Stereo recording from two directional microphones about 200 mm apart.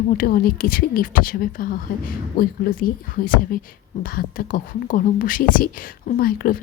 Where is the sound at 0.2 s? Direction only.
45° left (ahead or behind).